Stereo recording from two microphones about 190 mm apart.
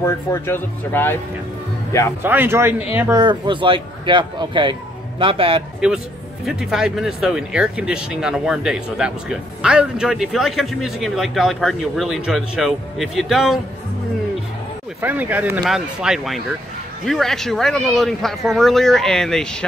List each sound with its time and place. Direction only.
0.0 s speech: 10° left (ahead or behind)
2.2 s speech: 10° right (ahead or behind)
3.2 s speech: 25° right (ahead or behind)
5.8 s speech: 5° right (ahead or behind)
15.0 s speech: 10° right (ahead or behind)